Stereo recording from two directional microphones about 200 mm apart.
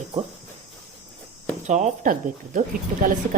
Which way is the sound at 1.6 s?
35° right (ahead or behind).